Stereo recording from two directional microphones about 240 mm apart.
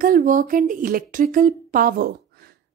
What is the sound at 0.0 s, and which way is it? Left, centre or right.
Speech, right.